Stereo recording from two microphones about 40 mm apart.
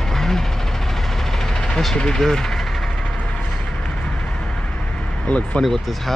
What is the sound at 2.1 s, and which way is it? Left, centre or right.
Speech, centre.